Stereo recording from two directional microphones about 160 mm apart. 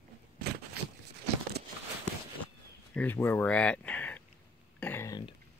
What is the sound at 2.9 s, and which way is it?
Speech, 10° left (ahead or behind).